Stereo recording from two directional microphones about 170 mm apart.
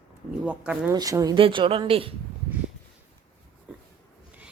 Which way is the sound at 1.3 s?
30° right (ahead or behind).